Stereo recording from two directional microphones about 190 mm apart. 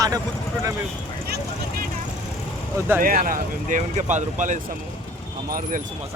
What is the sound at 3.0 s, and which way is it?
Speech, 45° right (ahead or behind).